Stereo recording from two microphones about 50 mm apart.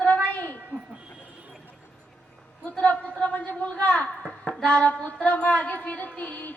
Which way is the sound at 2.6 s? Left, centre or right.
Left.